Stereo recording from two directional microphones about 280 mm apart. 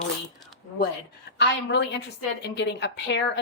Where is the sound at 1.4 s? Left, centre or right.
Left.